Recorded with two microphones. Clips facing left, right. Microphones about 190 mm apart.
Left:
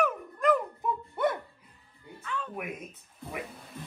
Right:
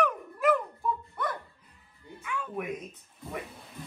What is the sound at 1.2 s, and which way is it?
Music, 25° left (ahead or behind).